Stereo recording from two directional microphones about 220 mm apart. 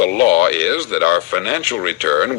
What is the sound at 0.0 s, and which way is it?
Speech, 50° left (ahead or behind).